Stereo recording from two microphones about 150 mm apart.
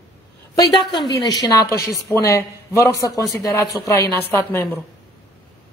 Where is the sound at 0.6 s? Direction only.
25° left (ahead or behind).